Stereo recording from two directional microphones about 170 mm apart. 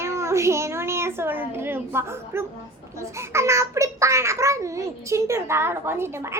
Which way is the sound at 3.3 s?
15° right (ahead or behind).